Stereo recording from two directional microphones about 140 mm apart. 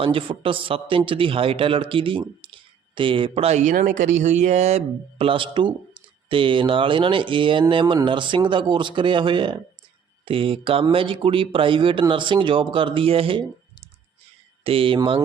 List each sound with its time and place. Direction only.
0.0 s speech: 40° right (ahead or behind)
14.6 s speech: 40° right (ahead or behind)